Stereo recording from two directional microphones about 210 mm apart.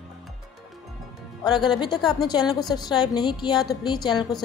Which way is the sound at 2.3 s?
20° left (ahead or behind).